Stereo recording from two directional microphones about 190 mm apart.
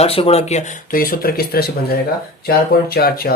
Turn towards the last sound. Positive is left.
turn(degrees=55)  # may be behind; listen again after turning